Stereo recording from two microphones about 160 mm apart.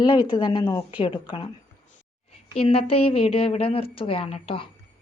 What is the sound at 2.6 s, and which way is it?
A woman's voice, 35° left (ahead or behind).